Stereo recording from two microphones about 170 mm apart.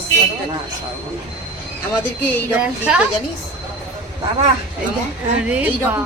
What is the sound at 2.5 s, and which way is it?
Speech, 5° right (ahead or behind).